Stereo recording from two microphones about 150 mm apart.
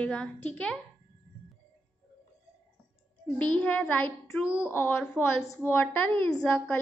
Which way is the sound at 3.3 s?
10° left (ahead or behind).